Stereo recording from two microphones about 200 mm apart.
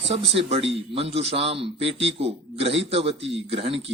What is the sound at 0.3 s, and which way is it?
A man's voice, 30° right (ahead or behind).